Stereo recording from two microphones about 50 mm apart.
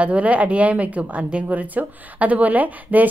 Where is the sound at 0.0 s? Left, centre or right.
Right.